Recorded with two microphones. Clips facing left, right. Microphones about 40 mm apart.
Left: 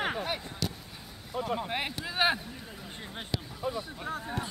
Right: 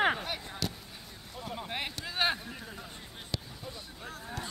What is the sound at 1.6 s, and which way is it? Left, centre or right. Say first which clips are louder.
Speech: left 4 dB; centre.